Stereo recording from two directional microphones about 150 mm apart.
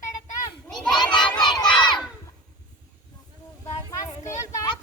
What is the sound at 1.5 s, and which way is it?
Crowd, 30° left (ahead or behind).